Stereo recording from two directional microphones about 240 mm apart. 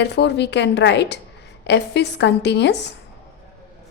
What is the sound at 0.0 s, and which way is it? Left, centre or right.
A woman's voice, left.